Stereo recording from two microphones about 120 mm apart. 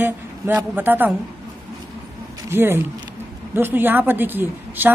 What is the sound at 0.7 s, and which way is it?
Speech, 15° right (ahead or behind).